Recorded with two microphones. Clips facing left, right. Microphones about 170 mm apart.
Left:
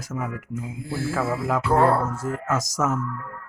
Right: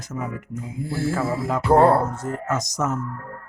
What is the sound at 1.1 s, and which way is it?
Music, 5° left (ahead or behind).